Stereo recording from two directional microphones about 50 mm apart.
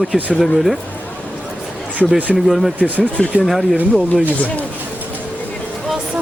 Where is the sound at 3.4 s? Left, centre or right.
Centre.